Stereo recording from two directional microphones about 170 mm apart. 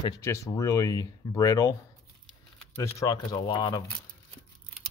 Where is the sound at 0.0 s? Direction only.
20° left (ahead or behind).